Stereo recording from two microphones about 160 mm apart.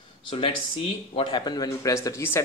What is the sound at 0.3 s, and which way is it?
Speech, 35° left (ahead or behind).